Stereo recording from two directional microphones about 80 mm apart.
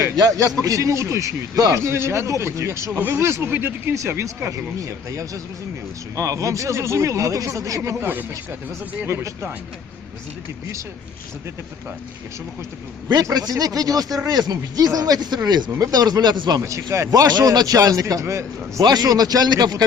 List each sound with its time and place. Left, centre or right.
0.2 s a man's voice: right
1.8 s speech: right
7.9 s speech: right
13.3 s a man's voice: right
15.4 s speech: right
15.8 s speech: right
16.6 s speech: right
17.1 s a man's voice: right
18.8 s speech: right